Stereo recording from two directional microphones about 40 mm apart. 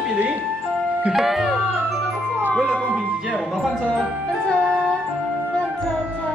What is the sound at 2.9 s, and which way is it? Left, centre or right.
Music, right.